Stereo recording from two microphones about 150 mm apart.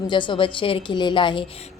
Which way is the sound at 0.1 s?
30° left (ahead or behind).